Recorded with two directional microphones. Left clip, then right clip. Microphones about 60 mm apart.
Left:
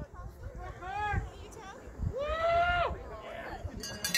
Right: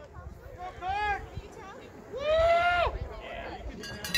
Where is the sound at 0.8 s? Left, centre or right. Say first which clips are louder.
Right 5 dB; right.